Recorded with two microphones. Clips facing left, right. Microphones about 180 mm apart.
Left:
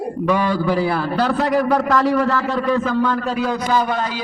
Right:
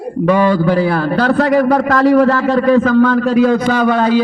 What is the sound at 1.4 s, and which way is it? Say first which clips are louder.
A man's voice: right 6 dB; 80° right.